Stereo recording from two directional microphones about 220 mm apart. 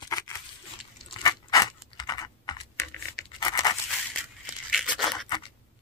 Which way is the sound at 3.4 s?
15° left (ahead or behind).